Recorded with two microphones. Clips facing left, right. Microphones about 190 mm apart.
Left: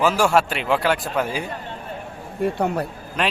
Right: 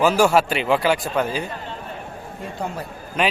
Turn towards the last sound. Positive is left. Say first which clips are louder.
# right 2 dB
turn(degrees=0)  # may be behind; listen again after turning